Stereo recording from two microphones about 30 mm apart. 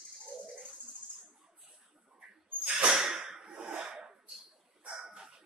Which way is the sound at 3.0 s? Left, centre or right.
Centre.